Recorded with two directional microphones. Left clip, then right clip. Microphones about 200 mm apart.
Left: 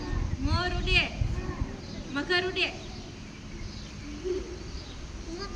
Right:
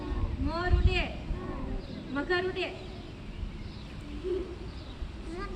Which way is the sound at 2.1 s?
Centre (ahead or behind).